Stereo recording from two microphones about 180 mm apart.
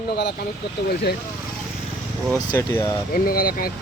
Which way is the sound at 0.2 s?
65° left (ahead or behind).